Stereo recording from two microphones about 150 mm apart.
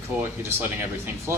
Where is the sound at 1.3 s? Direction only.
15° right (ahead or behind).